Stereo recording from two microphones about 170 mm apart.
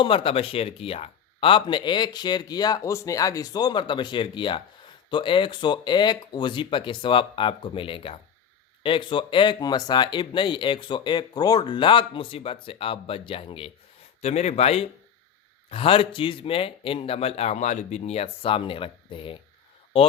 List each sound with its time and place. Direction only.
0.0 s a man's voice: 30° left (ahead or behind)